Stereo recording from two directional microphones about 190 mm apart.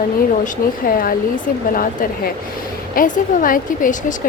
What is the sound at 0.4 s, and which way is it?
A woman's voice, 50° left (ahead or behind).